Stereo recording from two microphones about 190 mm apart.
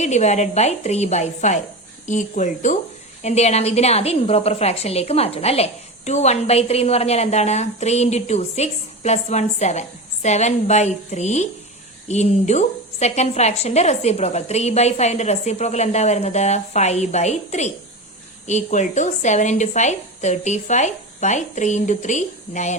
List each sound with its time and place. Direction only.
0.0 s a woman's voice: 35° left (ahead or behind)